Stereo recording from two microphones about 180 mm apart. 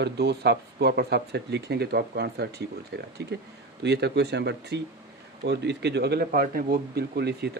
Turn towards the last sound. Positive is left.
turn(degrees=-65)  # may be behind; listen again after turning